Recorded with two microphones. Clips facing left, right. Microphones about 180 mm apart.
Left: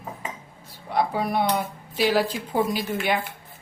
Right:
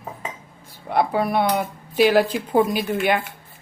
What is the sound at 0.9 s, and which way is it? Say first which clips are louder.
A woman's voice: right 4 dB; 60° right (ahead or behind).